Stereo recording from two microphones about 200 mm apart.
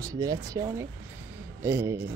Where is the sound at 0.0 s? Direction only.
15° right (ahead or behind).